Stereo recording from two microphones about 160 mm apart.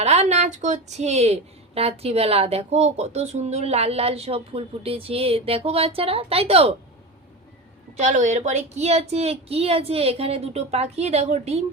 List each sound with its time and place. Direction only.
0.0 s a woman's voice: 40° right (ahead or behind)
7.9 s a woman's voice: 50° right (ahead or behind)